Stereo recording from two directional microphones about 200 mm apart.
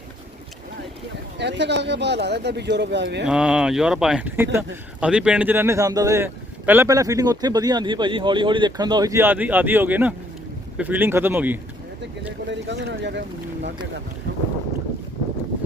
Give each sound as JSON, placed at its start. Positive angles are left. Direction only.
{"t": 1.4, "sound": "speech", "side_deg": -60}
{"t": 3.2, "sound": "speech", "side_deg": -5}
{"t": 12.5, "sound": "speech", "side_deg": -60}